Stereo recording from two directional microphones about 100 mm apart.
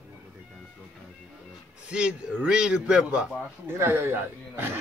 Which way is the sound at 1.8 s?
10° right (ahead or behind).